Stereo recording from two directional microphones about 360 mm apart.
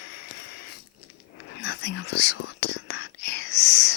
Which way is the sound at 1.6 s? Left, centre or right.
Left.